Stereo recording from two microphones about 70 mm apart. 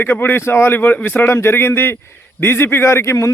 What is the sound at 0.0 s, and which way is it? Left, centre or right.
Speech, left.